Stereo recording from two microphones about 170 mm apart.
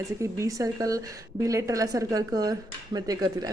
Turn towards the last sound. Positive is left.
turn(degrees=-25)  # may be behind; listen again after turning